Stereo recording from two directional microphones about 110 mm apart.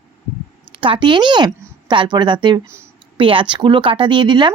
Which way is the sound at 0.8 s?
50° right (ahead or behind).